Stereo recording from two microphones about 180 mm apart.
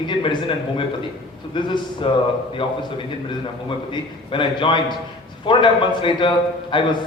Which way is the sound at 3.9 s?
25° left (ahead or behind).